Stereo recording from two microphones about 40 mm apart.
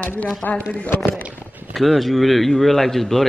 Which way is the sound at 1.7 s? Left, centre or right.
Centre.